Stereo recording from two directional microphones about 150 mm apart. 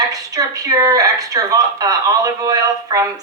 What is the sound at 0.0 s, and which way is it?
Speech, 25° right (ahead or behind).